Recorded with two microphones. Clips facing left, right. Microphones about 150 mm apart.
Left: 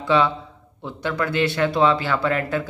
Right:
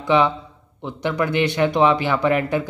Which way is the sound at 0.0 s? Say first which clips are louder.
Right 2 dB; 15° right (ahead or behind).